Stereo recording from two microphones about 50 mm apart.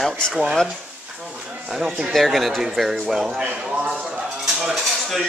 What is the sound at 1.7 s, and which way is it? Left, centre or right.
Speech, centre.